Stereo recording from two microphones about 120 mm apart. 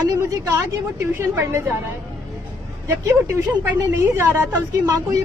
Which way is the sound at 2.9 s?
20° right (ahead or behind).